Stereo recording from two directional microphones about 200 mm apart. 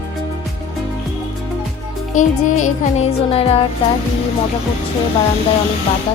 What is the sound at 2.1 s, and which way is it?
Music, 40° left (ahead or behind).